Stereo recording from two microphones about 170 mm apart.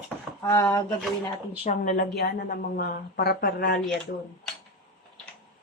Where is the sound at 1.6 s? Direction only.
50° left (ahead or behind).